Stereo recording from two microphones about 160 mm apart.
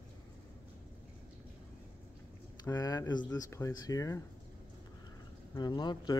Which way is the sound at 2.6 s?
20° left (ahead or behind).